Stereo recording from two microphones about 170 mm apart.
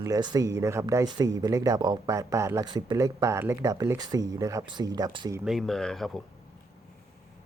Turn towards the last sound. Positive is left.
turn(degrees=0)  # may be behind; listen again after turning